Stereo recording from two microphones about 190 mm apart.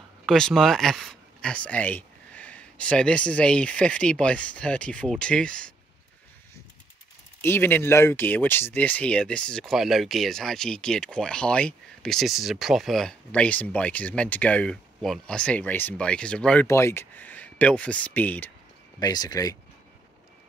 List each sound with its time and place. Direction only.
0.3 s speech: centre (ahead or behind)
7.4 s speech: 10° left (ahead or behind)
18.9 s speech: 20° left (ahead or behind)